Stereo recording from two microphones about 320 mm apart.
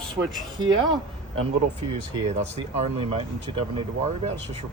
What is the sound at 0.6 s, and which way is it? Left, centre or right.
Speech, centre.